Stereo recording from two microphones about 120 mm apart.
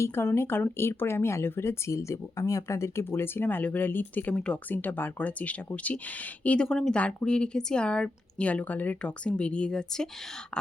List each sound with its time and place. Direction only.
0.0 s a woman's voice: 20° left (ahead or behind)